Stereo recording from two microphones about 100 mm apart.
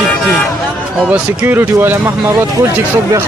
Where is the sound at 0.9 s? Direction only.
15° right (ahead or behind).